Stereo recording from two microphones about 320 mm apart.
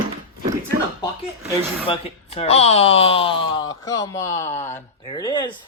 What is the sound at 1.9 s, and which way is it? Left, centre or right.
Speech, centre.